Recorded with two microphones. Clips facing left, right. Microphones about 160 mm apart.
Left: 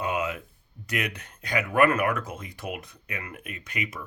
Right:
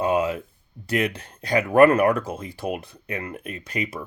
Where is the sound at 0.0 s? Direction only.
30° right (ahead or behind).